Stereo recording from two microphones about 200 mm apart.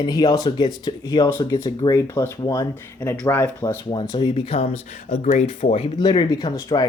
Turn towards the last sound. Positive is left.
turn(degrees=15)  # may be behind; listen again after turning